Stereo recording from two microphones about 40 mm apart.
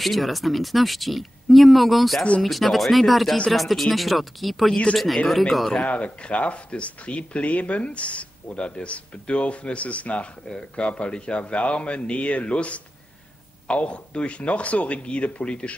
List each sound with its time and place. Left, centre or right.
0.0 s speech: centre
5.8 s speech: left